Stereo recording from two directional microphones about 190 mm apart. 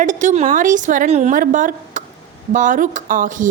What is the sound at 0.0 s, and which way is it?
A woman's voice, 40° right (ahead or behind).